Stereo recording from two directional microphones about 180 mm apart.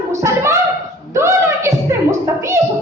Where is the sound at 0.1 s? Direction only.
15° right (ahead or behind).